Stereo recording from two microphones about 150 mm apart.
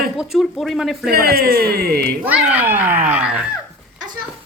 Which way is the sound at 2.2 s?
10° right (ahead or behind).